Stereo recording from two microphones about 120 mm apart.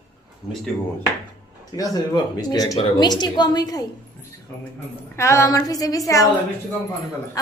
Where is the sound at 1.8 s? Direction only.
35° left (ahead or behind).